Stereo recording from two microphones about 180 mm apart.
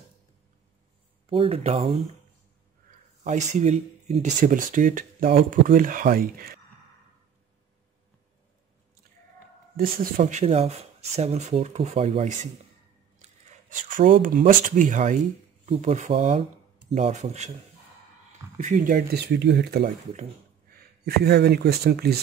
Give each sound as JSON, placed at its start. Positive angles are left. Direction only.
{"t": 1.3, "sound": "speech", "side_deg": -30}
{"t": 3.3, "sound": "speech", "side_deg": -40}
{"t": 9.8, "sound": "speech", "side_deg": -50}
{"t": 13.2, "sound": "a sound", "side_deg": -45}
{"t": 14.5, "sound": "speech", "side_deg": -45}
{"t": 18.6, "sound": "speech", "side_deg": -45}
{"t": 18.9, "sound": "speech", "side_deg": -65}
{"t": 21.0, "sound": "speech", "side_deg": -60}